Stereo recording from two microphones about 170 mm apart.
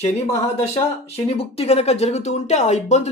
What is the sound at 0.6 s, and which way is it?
Speech, 35° left (ahead or behind).